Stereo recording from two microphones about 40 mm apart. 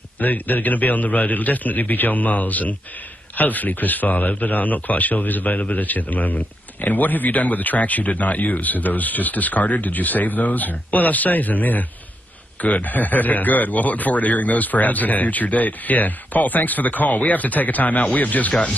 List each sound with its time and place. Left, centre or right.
0.2 s speech: left